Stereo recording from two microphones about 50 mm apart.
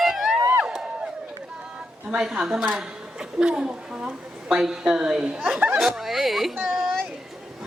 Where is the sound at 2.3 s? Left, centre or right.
Centre.